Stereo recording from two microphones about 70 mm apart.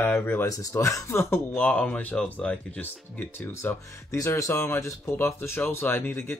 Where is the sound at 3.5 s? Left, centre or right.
Left.